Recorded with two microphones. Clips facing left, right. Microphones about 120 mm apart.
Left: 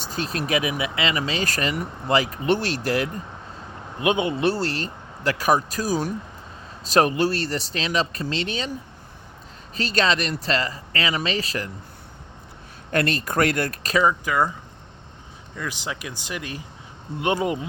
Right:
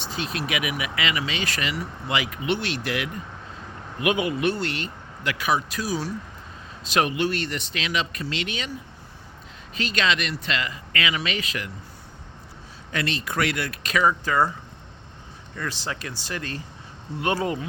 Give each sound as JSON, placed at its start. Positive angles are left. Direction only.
{"t": 0.0, "sound": "speech", "side_deg": 40}
{"t": 3.9, "sound": "speech", "side_deg": 25}
{"t": 9.7, "sound": "speech", "side_deg": 35}
{"t": 12.9, "sound": "speech", "side_deg": 50}
{"t": 14.0, "sound": "speech", "side_deg": 15}
{"t": 15.5, "sound": "speech", "side_deg": 15}